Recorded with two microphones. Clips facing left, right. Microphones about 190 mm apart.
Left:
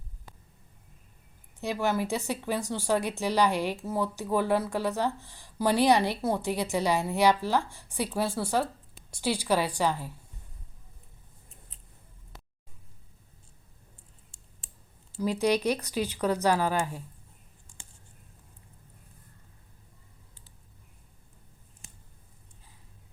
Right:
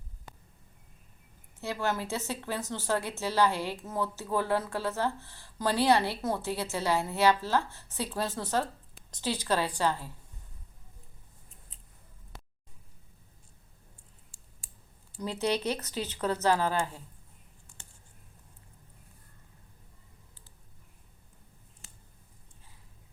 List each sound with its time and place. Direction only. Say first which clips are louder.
1.6 s speech: left 4 dB; 15° left (ahead or behind)
15.2 s speech: left 4 dB; 10° left (ahead or behind)